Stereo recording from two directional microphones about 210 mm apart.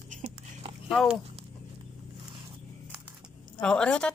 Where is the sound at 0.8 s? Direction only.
Centre (ahead or behind).